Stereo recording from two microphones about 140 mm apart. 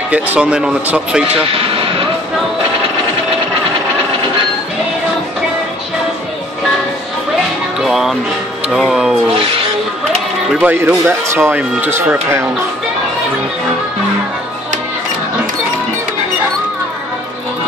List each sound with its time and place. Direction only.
0.1 s speech: 10° right (ahead or behind)
1.5 s vehicle: 40° right (ahead or behind)
7.8 s music: 5° right (ahead or behind)
8.6 s speech: 5° right (ahead or behind)
10.6 s speech: 10° right (ahead or behind)